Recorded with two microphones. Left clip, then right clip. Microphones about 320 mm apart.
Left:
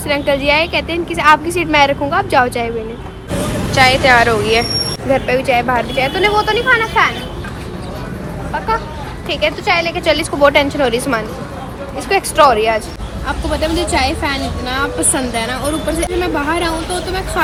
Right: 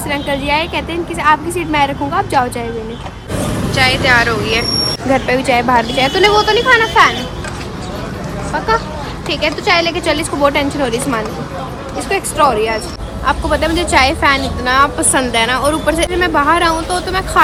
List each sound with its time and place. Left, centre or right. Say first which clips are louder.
0.1 s a woman's voice: left 3 dB; centre
3.7 s speech: left 2 dB; centre
5.1 s a woman's voice: even; centre
9.3 s a woman's voice: right 1 dB; centre